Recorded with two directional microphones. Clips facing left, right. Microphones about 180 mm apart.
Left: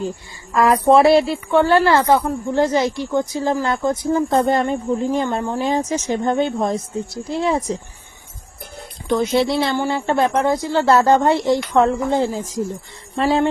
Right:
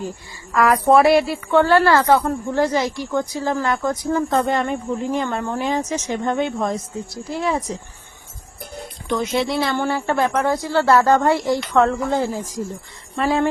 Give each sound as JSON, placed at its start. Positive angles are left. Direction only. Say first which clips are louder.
{"t": 0.5, "sound": "a woman's voice", "louder": "left 1 dB", "side_deg": 25}
{"t": 9.0, "sound": "speech", "louder": "left 4 dB", "side_deg": 30}